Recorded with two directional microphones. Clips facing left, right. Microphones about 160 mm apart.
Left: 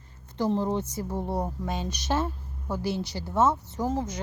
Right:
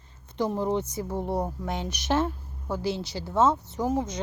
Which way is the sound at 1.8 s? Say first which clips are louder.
Right 4 dB; 10° left (ahead or behind).